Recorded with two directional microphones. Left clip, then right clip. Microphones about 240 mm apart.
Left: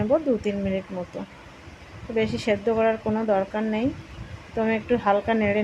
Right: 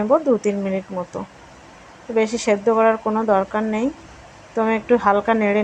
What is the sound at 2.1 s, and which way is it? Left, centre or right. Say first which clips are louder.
Speech: right 5 dB; centre.